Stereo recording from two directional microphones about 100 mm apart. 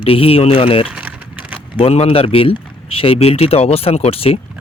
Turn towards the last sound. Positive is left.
turn(degrees=75)  # may be behind; listen again after turning